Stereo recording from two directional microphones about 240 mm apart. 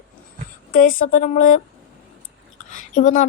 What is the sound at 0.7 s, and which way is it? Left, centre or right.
Speech, left.